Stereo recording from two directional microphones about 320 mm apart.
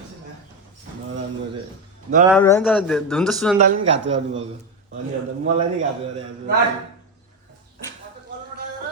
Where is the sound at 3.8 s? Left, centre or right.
Right.